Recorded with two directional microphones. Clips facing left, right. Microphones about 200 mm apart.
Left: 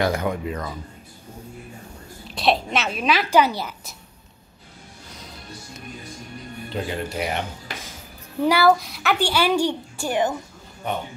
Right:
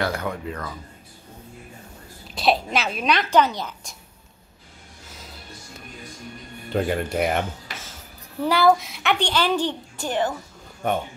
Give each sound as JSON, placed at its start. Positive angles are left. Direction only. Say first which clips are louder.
{"t": 0.0, "sound": "speech", "louder": "left 3 dB", "side_deg": 15}
{"t": 2.2, "sound": "a woman's voice", "louder": "even", "side_deg": 0}
{"t": 6.7, "sound": "speech", "louder": "right 5 dB", "side_deg": -50}
{"t": 7.8, "sound": "a woman's voice", "louder": "left 2 dB", "side_deg": 15}
{"t": 10.8, "sound": "speech", "louder": "right 4 dB", "side_deg": -50}